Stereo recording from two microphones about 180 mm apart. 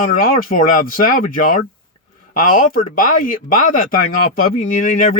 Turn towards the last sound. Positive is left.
turn(degrees=50)  # may be behind; listen again after turning